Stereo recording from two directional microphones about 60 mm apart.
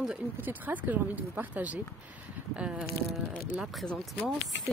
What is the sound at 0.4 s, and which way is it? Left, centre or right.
Speech, right.